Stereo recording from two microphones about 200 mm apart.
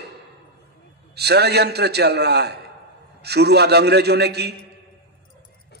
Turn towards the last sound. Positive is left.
turn(degrees=-55)  # may be behind; listen again after turning